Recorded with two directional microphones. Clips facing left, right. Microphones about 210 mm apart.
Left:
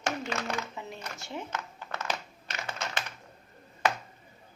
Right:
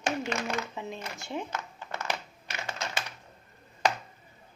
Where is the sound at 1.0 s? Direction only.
15° right (ahead or behind).